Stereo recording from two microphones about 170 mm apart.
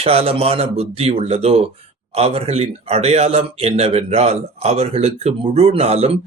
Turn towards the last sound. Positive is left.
turn(degrees=-35)  # may be behind; listen again after turning